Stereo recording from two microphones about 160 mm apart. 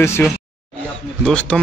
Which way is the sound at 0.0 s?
15° left (ahead or behind).